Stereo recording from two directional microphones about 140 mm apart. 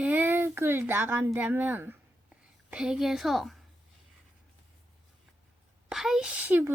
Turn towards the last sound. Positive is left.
turn(degrees=-15)  # may be behind; listen again after turning